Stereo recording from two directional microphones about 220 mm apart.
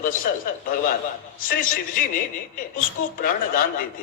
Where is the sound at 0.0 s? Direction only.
40° left (ahead or behind).